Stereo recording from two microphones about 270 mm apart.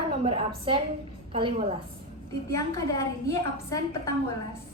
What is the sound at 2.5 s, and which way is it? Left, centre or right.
A woman's voice, centre.